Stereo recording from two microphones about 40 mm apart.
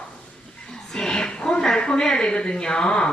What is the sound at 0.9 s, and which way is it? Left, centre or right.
Speech, centre.